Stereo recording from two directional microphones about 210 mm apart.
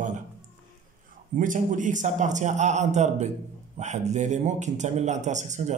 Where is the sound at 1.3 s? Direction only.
40° right (ahead or behind).